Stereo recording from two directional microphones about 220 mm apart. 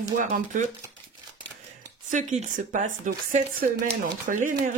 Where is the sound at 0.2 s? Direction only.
35° right (ahead or behind).